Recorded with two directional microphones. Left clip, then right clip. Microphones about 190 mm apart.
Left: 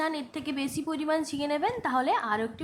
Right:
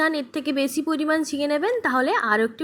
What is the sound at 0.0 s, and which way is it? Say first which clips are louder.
A woman's voice: right 8 dB; 20° right (ahead or behind).